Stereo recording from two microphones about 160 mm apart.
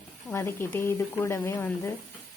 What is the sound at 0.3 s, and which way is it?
A woman's voice, 15° left (ahead or behind).